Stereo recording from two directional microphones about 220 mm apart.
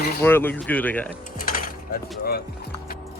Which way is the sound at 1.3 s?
40° left (ahead or behind).